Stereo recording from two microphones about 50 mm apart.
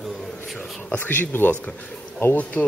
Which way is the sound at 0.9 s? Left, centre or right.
Left.